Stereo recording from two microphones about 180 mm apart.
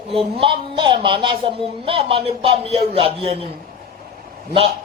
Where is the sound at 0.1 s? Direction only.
30° right (ahead or behind).